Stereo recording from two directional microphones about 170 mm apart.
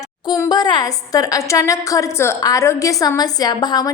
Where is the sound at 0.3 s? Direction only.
25° left (ahead or behind).